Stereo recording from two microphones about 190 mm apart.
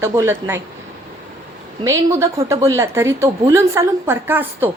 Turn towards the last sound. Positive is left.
turn(degrees=-10)  # may be behind; listen again after turning